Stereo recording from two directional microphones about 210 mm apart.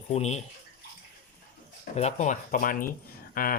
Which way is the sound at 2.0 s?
35° left (ahead or behind).